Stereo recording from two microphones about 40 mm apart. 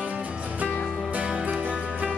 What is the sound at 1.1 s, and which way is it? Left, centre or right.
Music, right.